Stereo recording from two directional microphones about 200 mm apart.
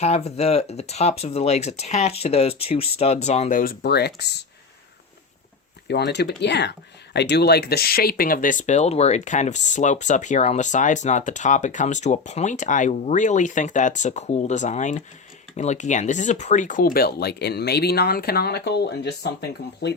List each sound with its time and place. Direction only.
0.0 s speech: 30° left (ahead or behind)
3.6 s speech: 50° left (ahead or behind)
5.9 s speech: 55° left (ahead or behind)